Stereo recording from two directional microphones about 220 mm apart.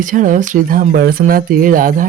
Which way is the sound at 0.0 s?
35° right (ahead or behind).